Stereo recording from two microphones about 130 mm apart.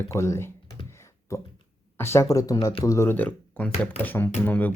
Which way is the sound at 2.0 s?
20° left (ahead or behind).